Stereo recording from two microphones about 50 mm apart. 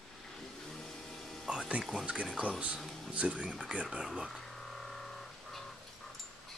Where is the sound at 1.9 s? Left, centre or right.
Centre.